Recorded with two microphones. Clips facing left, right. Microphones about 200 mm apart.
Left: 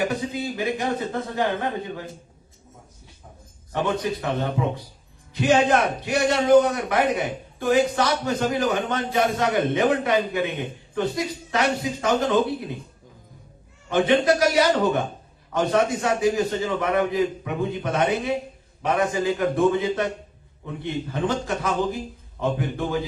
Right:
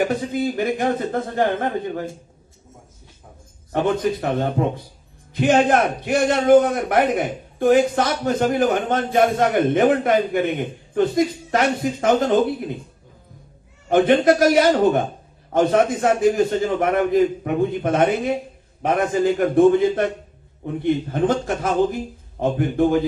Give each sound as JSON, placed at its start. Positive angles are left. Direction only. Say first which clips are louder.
{"t": 0.3, "sound": "a man's voice", "louder": "right 5 dB", "side_deg": -50}
{"t": 3.7, "sound": "a man's voice", "louder": "right 5 dB", "side_deg": -55}
{"t": 13.9, "sound": "a man's voice", "louder": "right 4 dB", "side_deg": -50}